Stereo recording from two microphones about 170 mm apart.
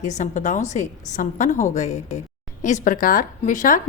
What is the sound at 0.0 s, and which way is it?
A woman's voice, 45° left (ahead or behind).